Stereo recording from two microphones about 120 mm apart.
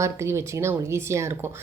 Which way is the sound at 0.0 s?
25° right (ahead or behind).